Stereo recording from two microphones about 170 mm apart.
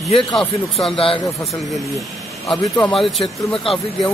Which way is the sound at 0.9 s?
35° left (ahead or behind).